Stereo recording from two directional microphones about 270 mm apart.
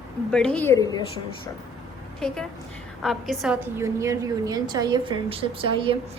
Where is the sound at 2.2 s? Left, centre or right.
Centre.